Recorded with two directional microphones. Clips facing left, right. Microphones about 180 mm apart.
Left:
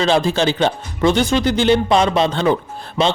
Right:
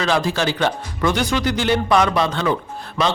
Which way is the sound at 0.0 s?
25° left (ahead or behind).